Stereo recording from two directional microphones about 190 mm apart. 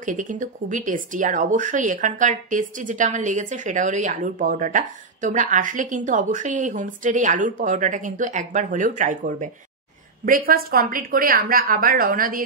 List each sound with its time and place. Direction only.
0.0 s a woman's voice: 45° right (ahead or behind)